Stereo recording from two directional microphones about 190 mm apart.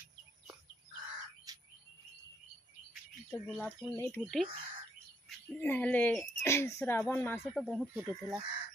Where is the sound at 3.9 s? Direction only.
15° left (ahead or behind).